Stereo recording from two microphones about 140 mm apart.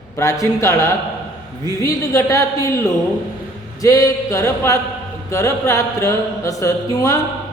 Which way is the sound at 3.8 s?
20° left (ahead or behind).